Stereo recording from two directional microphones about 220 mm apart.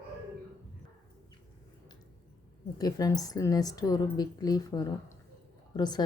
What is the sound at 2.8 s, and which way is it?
A woman's voice, 15° left (ahead or behind).